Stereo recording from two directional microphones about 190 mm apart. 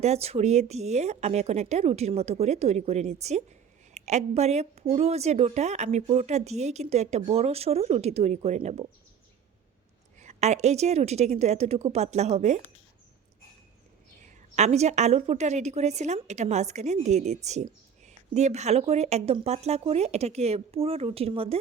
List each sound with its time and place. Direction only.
0.0 s a woman's voice: 35° right (ahead or behind)
10.2 s a woman's voice: 35° right (ahead or behind)
14.2 s a woman's voice: 40° right (ahead or behind)